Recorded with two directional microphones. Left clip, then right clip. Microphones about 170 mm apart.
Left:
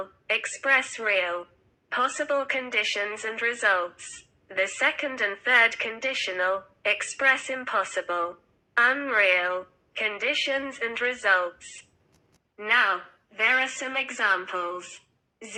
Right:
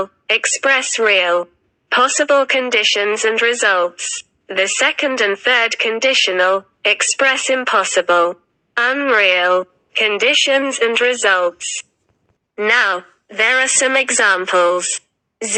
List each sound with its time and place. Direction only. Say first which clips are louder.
0.0 s speech: right 11 dB; 40° right (ahead or behind)
12.5 s a woman's voice: right 8 dB; 50° right (ahead or behind)